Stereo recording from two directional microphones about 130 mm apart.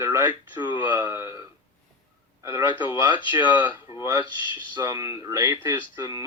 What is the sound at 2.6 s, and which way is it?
Speech, 40° left (ahead or behind).